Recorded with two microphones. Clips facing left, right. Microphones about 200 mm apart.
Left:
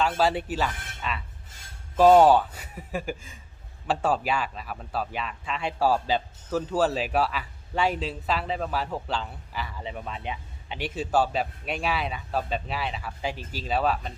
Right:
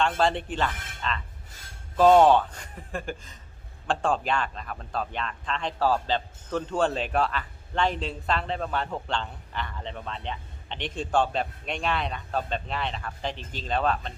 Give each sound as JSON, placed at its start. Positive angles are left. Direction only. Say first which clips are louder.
{"t": 0.0, "sound": "a man's voice", "louder": "even", "side_deg": 5}